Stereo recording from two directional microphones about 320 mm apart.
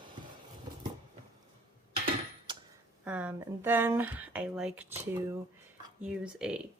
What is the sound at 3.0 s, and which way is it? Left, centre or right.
Speech, centre.